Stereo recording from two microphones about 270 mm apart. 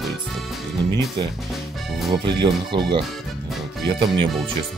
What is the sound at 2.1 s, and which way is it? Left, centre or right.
Speech, centre.